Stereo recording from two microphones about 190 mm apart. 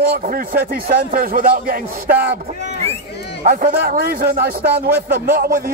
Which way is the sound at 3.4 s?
45° right (ahead or behind).